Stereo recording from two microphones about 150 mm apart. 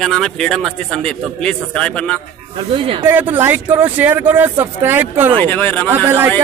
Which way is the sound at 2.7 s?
35° right (ahead or behind).